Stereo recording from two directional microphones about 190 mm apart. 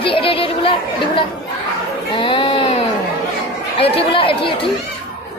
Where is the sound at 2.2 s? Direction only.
25° left (ahead or behind).